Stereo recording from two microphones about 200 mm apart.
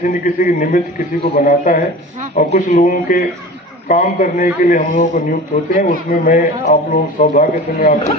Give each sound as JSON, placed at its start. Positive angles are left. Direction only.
{"t": 0.1, "sound": "a man's voice", "side_deg": 45}